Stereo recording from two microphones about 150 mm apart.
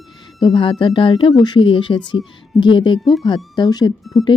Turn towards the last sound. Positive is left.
turn(degrees=0)  # may be behind; listen again after turning